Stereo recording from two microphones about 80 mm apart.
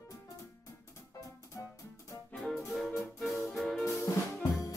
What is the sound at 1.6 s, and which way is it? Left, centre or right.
Music, left.